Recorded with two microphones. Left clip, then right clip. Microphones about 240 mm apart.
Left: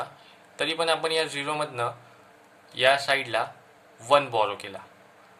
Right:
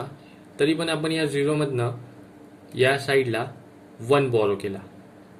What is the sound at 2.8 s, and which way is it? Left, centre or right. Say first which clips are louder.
A man's voice: right 1 dB; left.